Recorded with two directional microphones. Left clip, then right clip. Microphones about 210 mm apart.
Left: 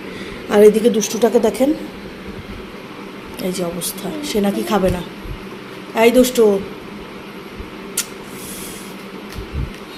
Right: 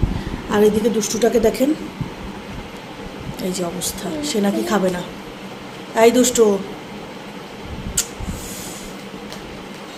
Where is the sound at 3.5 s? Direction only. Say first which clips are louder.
Left 1 dB; 5° left (ahead or behind).